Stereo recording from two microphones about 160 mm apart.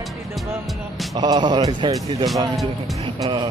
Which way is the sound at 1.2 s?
25° right (ahead or behind).